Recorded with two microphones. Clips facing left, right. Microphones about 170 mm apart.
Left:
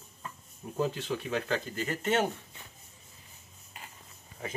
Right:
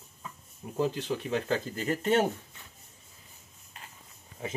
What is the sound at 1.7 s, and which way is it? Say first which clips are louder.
Speech: right 4 dB; 35° right (ahead or behind).